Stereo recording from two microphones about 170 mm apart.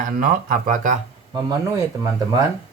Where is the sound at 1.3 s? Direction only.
20° right (ahead or behind).